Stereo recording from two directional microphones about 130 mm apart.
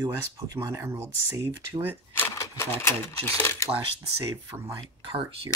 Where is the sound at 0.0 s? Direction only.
30° right (ahead or behind).